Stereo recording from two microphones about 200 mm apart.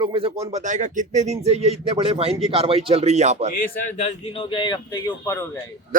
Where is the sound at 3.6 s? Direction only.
35° left (ahead or behind).